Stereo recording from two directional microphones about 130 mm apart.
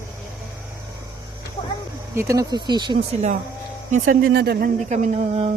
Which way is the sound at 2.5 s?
35° right (ahead or behind).